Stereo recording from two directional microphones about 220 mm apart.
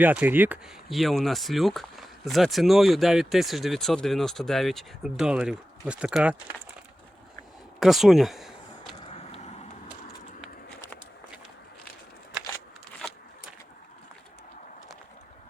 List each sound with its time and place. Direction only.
0.0 s speech: 10° right (ahead or behind)
7.8 s a sound: centre (ahead or behind)
9.0 s vehicle: 30° left (ahead or behind)